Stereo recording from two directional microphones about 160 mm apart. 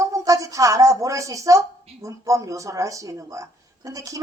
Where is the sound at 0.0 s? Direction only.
20° right (ahead or behind).